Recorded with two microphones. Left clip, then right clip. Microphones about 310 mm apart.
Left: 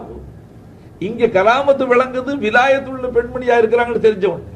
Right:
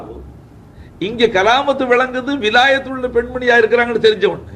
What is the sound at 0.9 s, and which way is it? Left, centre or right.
A man's voice, right.